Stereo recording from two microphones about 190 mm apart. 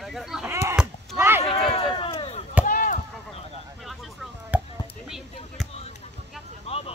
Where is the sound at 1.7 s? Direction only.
30° left (ahead or behind).